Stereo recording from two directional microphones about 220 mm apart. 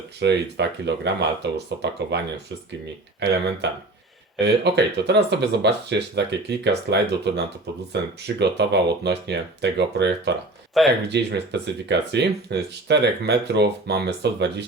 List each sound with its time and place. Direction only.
0.2 s speech: 50° right (ahead or behind)
4.4 s speech: 50° right (ahead or behind)
10.8 s speech: centre (ahead or behind)
11.1 s speech: 50° right (ahead or behind)